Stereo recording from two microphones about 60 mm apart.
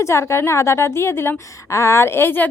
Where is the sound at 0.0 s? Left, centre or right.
Left.